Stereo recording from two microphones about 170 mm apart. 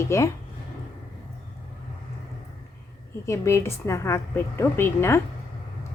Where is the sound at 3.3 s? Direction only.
15° left (ahead or behind).